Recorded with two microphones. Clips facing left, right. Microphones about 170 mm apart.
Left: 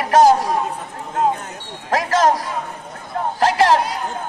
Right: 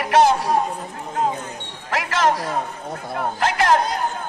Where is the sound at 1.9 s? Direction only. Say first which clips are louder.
Left 4 dB; 40° left (ahead or behind).